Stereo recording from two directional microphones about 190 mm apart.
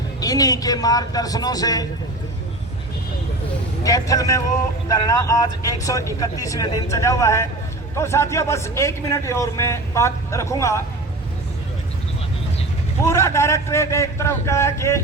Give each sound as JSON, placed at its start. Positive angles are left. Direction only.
{"t": 0.2, "sound": "speech", "side_deg": 20}
{"t": 3.8, "sound": "a man's voice", "side_deg": 20}
{"t": 13.1, "sound": "a man's voice", "side_deg": 15}